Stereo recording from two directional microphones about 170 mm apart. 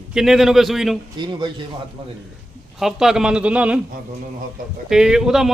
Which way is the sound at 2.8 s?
Centre (ahead or behind).